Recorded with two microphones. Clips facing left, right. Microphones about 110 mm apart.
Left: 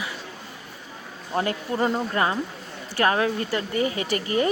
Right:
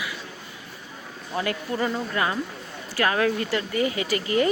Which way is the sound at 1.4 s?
35° left (ahead or behind).